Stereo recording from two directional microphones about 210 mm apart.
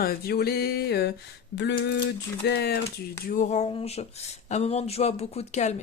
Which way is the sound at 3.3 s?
35° left (ahead or behind).